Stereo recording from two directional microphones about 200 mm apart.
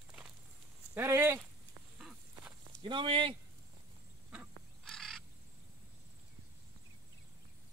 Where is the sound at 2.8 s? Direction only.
25° right (ahead or behind).